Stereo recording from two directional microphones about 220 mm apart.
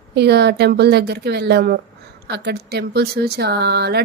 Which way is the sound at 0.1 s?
50° right (ahead or behind).